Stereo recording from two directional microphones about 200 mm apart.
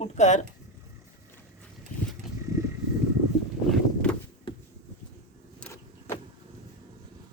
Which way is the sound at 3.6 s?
5° left (ahead or behind).